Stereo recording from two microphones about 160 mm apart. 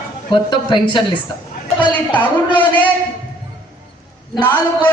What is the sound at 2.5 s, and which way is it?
Speech, 30° left (ahead or behind).